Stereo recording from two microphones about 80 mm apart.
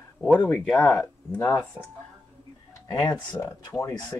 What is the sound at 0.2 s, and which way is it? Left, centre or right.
Speech, centre.